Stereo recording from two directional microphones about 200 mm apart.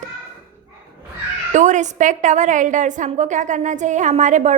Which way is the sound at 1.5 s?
35° right (ahead or behind).